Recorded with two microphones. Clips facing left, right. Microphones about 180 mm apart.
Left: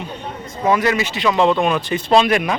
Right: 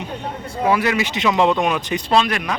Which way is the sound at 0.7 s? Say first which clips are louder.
Left 2 dB; 10° right (ahead or behind).